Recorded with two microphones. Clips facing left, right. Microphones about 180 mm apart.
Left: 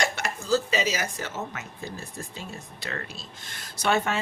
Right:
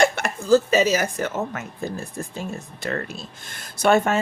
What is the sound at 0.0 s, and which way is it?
Speech, 50° right (ahead or behind).